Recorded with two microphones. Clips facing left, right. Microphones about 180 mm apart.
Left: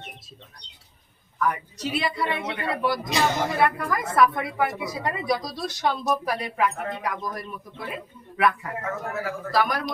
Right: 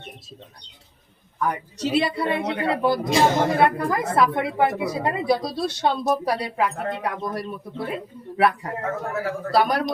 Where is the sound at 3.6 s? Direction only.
30° right (ahead or behind).